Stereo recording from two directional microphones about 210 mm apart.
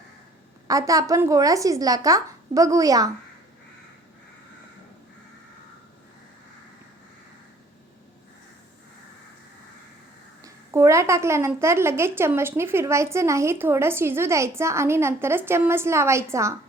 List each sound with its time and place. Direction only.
0.7 s a woman's voice: 15° right (ahead or behind)
10.4 s a woman's voice: 15° right (ahead or behind)